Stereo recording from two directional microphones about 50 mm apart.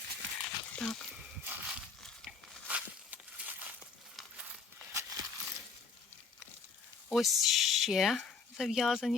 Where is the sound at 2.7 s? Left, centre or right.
Right.